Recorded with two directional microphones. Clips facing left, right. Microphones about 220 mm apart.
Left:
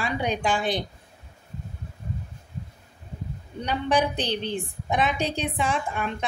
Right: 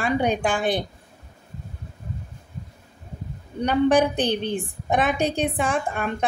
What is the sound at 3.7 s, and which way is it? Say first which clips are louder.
A woman's voice: right 6 dB; 50° right (ahead or behind).